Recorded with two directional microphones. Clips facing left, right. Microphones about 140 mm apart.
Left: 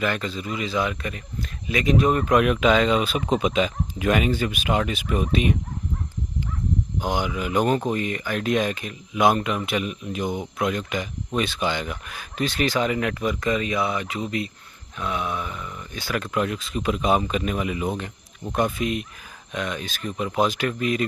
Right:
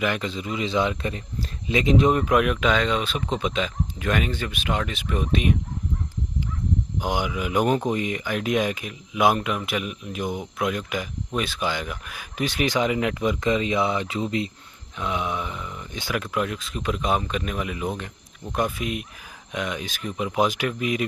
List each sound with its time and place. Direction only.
0.0 s speech: 15° right (ahead or behind)
2.3 s speech: centre (ahead or behind)
7.0 s speech: 10° right (ahead or behind)